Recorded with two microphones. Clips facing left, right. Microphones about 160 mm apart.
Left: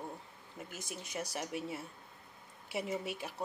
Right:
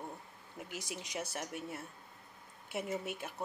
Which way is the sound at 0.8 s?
15° right (ahead or behind).